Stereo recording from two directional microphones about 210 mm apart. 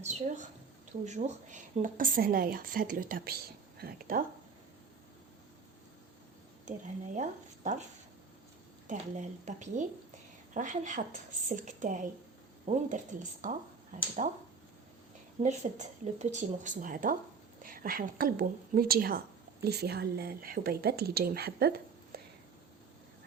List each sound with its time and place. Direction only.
0.0 s a woman's voice: 35° right (ahead or behind)
6.7 s speech: 35° right (ahead or behind)
8.9 s speech: 35° right (ahead or behind)
15.4 s a woman's voice: 35° right (ahead or behind)